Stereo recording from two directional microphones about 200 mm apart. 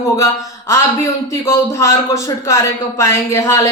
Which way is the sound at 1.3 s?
15° left (ahead or behind).